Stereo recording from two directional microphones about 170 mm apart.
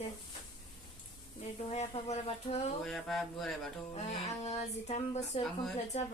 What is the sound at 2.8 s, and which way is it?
Speech, centre (ahead or behind).